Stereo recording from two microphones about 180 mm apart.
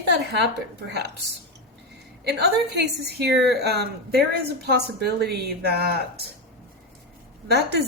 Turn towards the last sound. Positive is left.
turn(degrees=-65)  # may be behind; listen again after turning